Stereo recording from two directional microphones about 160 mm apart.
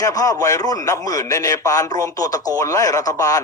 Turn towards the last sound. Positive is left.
turn(degrees=20)  # may be behind; listen again after turning